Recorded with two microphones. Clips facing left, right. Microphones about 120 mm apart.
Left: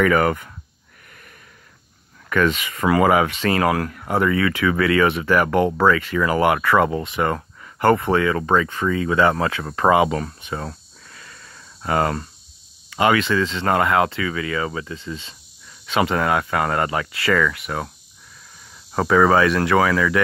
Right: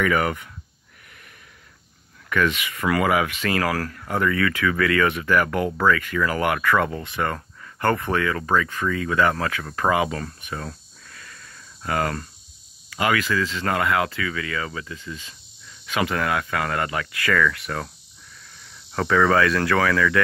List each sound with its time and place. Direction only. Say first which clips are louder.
0.0 s speech: left 4 dB; 40° left (ahead or behind)
2.2 s speech: left 3 dB; 40° left (ahead or behind)
3.7 s speech: left 4 dB; 20° left (ahead or behind)
11.1 s a sound: left 1 dB; 25° left (ahead or behind)
12.9 s speech: left 4 dB; 30° left (ahead or behind)
18.9 s speech: left 3 dB; 25° left (ahead or behind)